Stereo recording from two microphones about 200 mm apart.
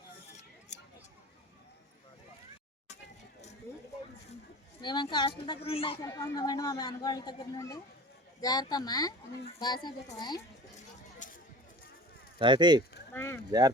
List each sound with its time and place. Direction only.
0.7 s a sound: 35° left (ahead or behind)
4.8 s speech: 20° left (ahead or behind)
11.2 s a sound: 40° left (ahead or behind)
12.4 s speech: 20° right (ahead or behind)
13.1 s speech: 15° left (ahead or behind)
13.5 s speech: 20° right (ahead or behind)